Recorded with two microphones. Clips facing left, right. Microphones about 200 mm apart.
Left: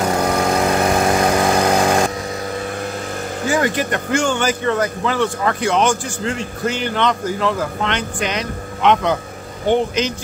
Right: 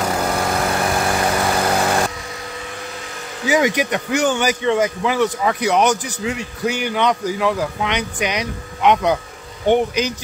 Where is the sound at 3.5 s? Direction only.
15° right (ahead or behind).